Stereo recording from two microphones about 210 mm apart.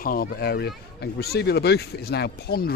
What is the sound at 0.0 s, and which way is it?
Speech, 45° left (ahead or behind).